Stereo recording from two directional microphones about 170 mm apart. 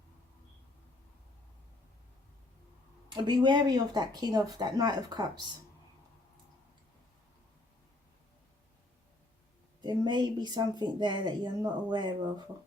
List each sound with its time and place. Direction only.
3.1 s speech: 25° right (ahead or behind)
9.8 s speech: 25° right (ahead or behind)